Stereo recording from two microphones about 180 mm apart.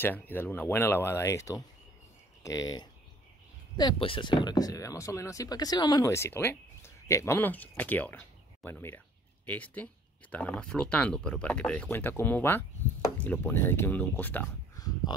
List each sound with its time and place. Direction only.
0.0 s speech: 10° left (ahead or behind)
15.1 s speech: 25° left (ahead or behind)